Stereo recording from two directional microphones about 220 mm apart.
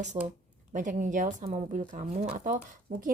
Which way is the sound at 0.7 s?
35° right (ahead or behind).